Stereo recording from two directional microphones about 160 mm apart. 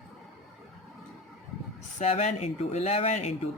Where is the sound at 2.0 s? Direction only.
40° left (ahead or behind).